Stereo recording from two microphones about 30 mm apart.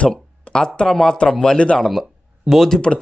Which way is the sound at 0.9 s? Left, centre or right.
Centre.